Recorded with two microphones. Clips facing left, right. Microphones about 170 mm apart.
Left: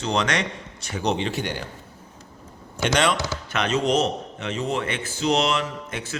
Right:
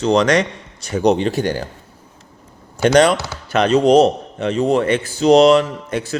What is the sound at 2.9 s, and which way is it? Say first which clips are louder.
A man's voice: right 9 dB; 40° right (ahead or behind).